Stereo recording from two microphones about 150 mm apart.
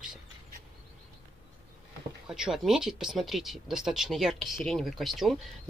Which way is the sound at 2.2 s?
5° right (ahead or behind).